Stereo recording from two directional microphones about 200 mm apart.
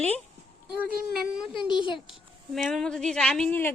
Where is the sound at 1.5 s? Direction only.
25° left (ahead or behind).